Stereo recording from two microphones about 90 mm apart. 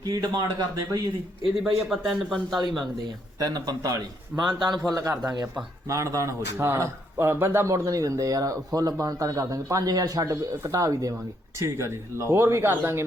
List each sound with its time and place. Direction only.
0.0 s a man's voice: 45° right (ahead or behind)
1.6 s speech: centre (ahead or behind)
2.6 s speech: 50° right (ahead or behind)
4.9 s a man's voice: 40° right (ahead or behind)